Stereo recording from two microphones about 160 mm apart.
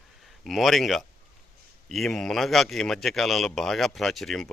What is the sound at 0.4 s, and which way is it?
Speech, centre (ahead or behind).